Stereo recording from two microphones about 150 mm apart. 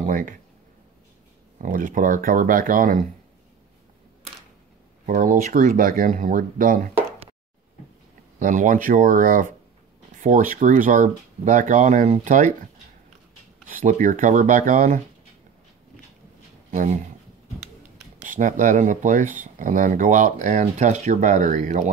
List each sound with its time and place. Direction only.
0.0 s speech: 65° right (ahead or behind)
1.6 s speech: 65° right (ahead or behind)
5.0 s speech: 65° right (ahead or behind)
8.4 s speech: 60° right (ahead or behind)
13.7 s speech: 60° right (ahead or behind)
16.7 s speech: 55° right (ahead or behind)
18.2 s speech: 60° right (ahead or behind)